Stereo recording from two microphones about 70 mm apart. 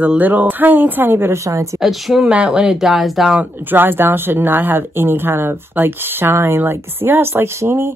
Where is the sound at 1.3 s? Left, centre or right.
Right.